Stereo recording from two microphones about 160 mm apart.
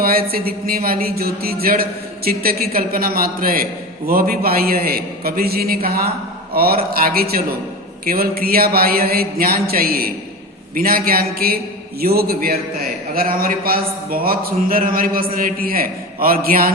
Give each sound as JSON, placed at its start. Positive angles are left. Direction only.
{"t": 0.0, "sound": "speech", "side_deg": -70}